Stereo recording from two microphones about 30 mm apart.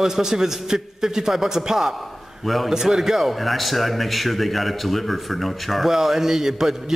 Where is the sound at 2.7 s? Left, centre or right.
Centre.